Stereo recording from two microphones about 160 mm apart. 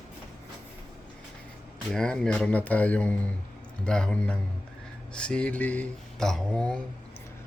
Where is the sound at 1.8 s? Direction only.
5° left (ahead or behind).